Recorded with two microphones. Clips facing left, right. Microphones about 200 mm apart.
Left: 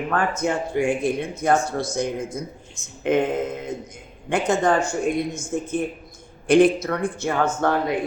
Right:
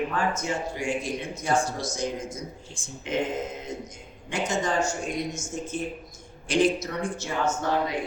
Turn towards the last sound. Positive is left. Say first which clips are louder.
# left 5 dB
turn(degrees=55)  # may be behind; listen again after turning